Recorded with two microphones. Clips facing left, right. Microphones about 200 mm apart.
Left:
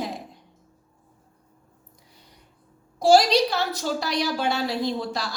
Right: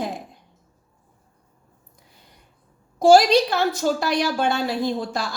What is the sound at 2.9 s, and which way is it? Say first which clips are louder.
A woman's voice: right 3 dB; 50° right (ahead or behind).